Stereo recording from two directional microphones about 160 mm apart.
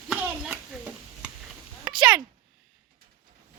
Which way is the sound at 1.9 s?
5° right (ahead or behind).